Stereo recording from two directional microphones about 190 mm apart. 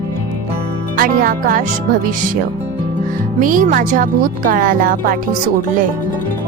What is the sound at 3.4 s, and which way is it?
Speech, 45° right (ahead or behind).